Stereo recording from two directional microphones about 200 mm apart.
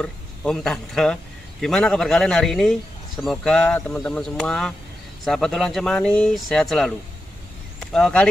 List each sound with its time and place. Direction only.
0.0 s a man's voice: 5° left (ahead or behind)